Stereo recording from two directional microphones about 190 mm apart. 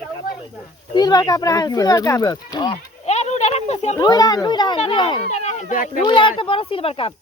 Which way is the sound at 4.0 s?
20° left (ahead or behind).